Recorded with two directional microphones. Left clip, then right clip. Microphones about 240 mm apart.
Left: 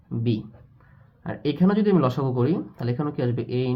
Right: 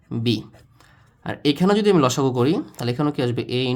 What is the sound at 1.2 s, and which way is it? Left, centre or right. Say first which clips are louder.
Speech: right 5 dB; right.